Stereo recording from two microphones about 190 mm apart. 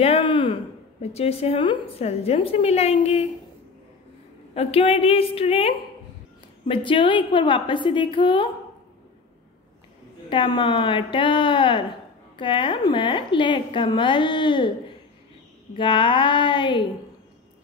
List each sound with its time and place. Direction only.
0.0 s a sound: 30° left (ahead or behind)
1.0 s a woman's voice: 35° left (ahead or behind)
4.6 s a woman's voice: 30° left (ahead or behind)
10.3 s a woman's voice: 25° left (ahead or behind)
15.7 s a woman's voice: 25° left (ahead or behind)